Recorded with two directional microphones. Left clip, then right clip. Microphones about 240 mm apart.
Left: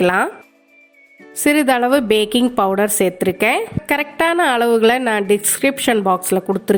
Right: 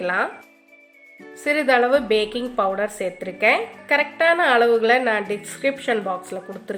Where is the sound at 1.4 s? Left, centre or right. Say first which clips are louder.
Left 3 dB; left.